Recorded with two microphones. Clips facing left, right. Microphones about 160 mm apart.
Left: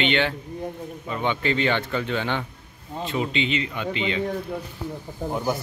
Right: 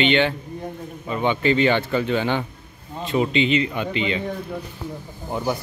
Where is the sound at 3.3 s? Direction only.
25° left (ahead or behind).